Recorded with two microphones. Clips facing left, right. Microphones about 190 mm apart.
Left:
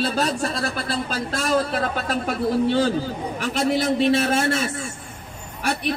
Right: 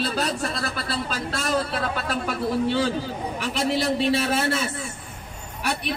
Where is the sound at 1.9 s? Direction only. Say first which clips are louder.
Left 2 dB; 45° left (ahead or behind).